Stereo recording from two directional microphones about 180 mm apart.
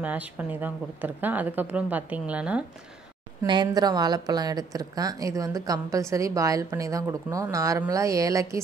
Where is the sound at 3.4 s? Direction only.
25° right (ahead or behind).